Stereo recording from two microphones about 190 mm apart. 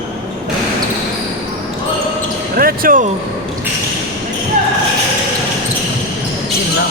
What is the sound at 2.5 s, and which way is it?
Speech, 50° right (ahead or behind).